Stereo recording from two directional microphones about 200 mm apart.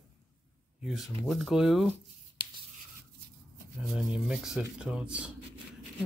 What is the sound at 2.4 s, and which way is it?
Writing, 25° right (ahead or behind).